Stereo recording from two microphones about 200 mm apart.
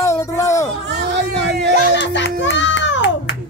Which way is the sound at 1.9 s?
60° left (ahead or behind).